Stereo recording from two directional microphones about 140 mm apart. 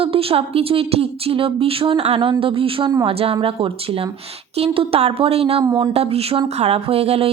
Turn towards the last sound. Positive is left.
turn(degrees=-45)  # may be behind; listen again after turning